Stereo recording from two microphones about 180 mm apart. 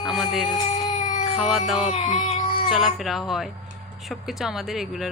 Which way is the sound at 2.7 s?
Centre (ahead or behind).